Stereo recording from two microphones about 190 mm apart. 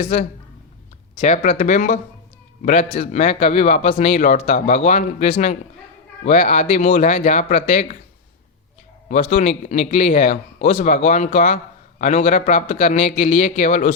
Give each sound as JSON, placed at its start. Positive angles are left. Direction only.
{"t": 1.2, "sound": "a man's voice", "side_deg": 35}
{"t": 9.0, "sound": "a man's voice", "side_deg": 40}